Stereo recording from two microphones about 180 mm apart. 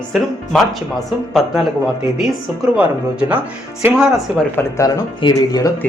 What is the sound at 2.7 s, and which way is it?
Speech, 5° right (ahead or behind).